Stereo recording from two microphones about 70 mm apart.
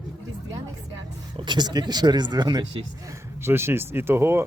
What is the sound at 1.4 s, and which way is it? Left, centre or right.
Speech, right.